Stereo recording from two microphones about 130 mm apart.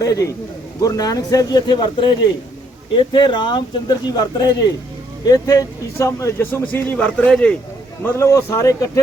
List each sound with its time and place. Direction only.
0.0 s a man's voice: 25° left (ahead or behind); by 7.6 s 5° left (ahead or behind)
8.0 s a man's voice: 20° left (ahead or behind)